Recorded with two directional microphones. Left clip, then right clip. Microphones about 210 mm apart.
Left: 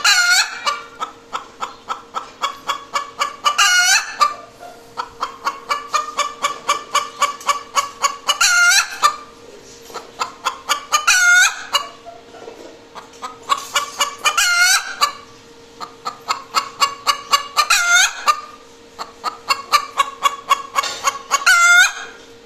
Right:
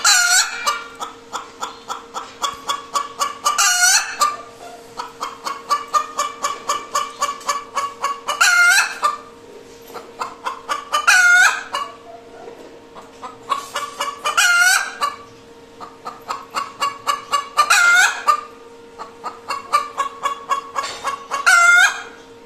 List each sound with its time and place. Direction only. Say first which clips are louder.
0.0 s chicken: left 1 dB; 10° left (ahead or behind)
7.2 s fowl: left 3 dB; 15° left (ahead or behind)
10.2 s chicken: left 3 dB; 10° left (ahead or behind)
13.5 s chicken: left 4 dB; 10° left (ahead or behind)
15.8 s fowl: left 4 dB; 5° left (ahead or behind)
18.9 s chicken: left 5 dB; 15° left (ahead or behind)